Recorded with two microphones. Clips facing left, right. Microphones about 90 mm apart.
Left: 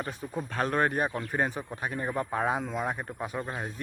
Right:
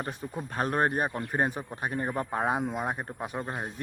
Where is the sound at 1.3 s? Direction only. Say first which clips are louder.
Right 1 dB; 45° right (ahead or behind).